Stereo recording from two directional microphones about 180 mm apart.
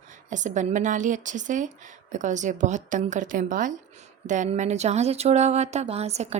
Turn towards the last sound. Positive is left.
turn(degrees=-35)  # may be behind; listen again after turning